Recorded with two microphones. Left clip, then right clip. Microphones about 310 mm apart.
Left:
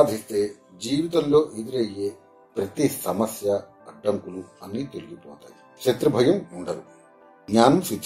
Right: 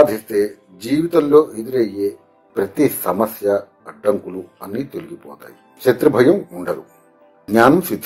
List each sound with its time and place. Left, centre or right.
0.0 s speech: centre